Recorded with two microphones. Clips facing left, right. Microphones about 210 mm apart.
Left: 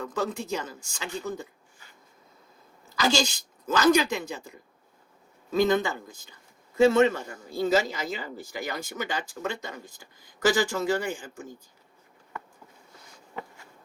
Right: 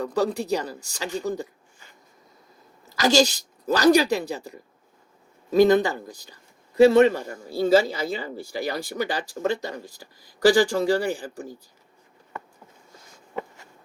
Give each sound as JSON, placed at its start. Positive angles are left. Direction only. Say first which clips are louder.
{"t": 0.0, "sound": "speech", "louder": "right 6 dB", "side_deg": -35}
{"t": 3.0, "sound": "a man's voice", "louder": "right 6 dB", "side_deg": -40}